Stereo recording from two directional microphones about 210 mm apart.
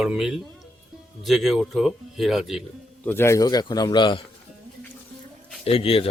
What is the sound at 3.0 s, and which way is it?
A man's voice, 10° left (ahead or behind).